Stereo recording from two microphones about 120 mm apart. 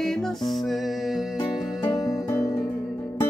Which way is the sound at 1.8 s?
25° left (ahead or behind).